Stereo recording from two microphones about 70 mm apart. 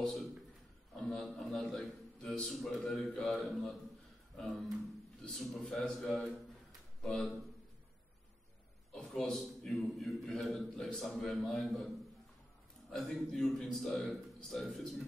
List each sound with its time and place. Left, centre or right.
0.9 s a man's voice: centre
8.9 s a man's voice: centre
12.9 s a man's voice: centre